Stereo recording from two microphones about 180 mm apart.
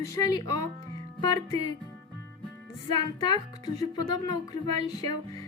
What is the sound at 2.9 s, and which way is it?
Speech, 25° left (ahead or behind).